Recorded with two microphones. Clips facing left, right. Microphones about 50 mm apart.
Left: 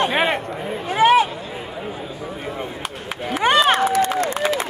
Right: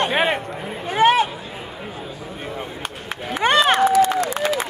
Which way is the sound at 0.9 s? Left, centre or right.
Right.